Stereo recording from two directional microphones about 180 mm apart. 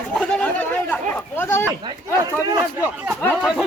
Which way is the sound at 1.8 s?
20° right (ahead or behind).